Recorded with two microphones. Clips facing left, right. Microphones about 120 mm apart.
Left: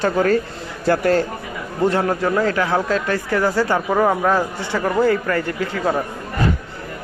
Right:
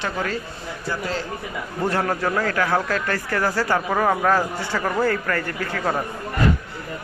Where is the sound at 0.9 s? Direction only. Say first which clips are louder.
Left 11 dB; 65° left (ahead or behind).